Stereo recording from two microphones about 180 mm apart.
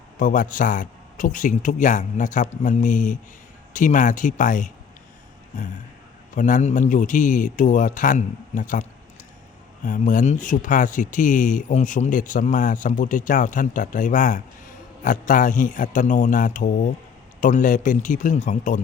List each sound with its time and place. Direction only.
0.2 s speech: 50° left (ahead or behind)
6.3 s speech: 45° left (ahead or behind)